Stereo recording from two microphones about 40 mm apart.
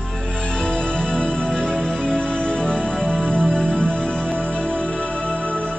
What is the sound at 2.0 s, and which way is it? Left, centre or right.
Music, centre.